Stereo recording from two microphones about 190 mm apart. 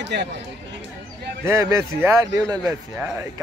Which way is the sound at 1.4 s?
15° right (ahead or behind).